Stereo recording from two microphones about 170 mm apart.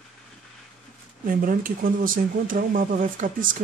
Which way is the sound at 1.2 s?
55° right (ahead or behind).